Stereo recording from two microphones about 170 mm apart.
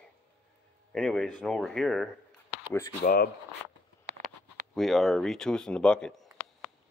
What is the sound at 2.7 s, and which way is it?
Speech, 15° left (ahead or behind).